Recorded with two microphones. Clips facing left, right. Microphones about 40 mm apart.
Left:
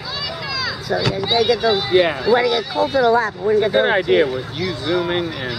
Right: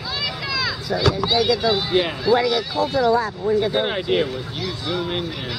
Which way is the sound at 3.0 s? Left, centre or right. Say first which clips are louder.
Left 3 dB; left.